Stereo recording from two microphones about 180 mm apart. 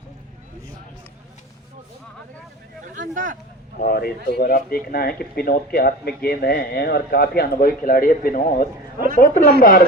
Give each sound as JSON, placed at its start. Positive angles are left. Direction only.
{"t": 2.8, "sound": "speech", "side_deg": -45}
{"t": 3.8, "sound": "speech", "side_deg": 60}